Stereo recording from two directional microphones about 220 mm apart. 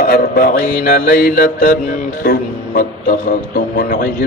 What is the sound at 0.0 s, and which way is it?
A man's voice, 45° left (ahead or behind).